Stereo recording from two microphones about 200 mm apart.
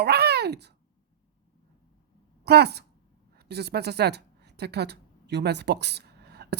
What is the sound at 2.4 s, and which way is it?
A woman's voice, 55° right (ahead or behind).